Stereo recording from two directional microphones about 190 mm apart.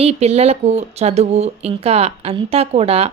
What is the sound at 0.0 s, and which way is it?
A woman's voice, 35° right (ahead or behind).